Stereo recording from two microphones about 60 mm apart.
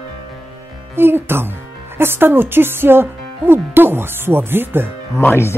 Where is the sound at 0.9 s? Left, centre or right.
Right.